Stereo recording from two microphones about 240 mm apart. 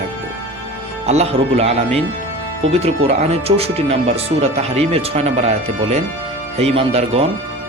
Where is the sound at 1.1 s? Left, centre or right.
Right.